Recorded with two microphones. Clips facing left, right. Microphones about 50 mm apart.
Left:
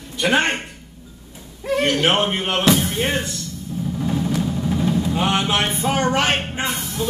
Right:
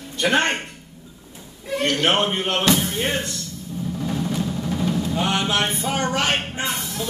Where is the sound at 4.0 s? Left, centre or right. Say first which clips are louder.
Left 3 dB; centre.